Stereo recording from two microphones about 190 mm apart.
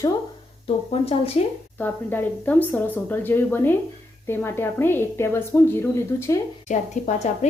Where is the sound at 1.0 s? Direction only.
30° left (ahead or behind).